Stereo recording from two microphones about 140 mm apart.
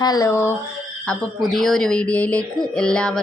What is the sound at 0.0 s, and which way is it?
Speech, 25° left (ahead or behind).